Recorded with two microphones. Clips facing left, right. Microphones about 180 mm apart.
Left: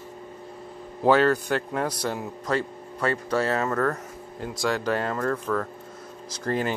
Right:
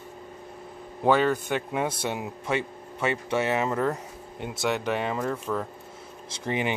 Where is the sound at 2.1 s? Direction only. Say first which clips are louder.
Left 1 dB; 15° right (ahead or behind).